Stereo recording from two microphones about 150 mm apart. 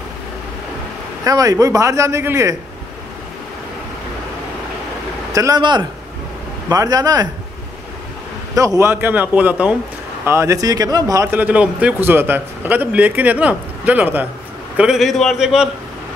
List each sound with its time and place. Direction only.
1.2 s a man's voice: 25° right (ahead or behind)
5.3 s a man's voice: 25° right (ahead or behind)
8.5 s a man's voice: 20° right (ahead or behind)
11.3 s a man's voice: 10° right (ahead or behind)